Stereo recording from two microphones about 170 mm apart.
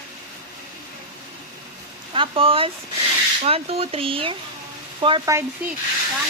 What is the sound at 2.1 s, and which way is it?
Speech, 30° right (ahead or behind).